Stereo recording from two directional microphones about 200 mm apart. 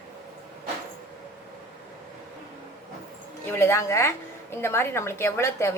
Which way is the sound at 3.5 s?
15° left (ahead or behind).